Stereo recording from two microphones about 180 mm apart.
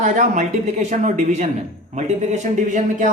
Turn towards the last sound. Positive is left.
turn(degrees=-40)  # may be behind; listen again after turning